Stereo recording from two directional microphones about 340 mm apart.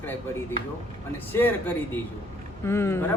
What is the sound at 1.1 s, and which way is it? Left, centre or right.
A man's voice, centre.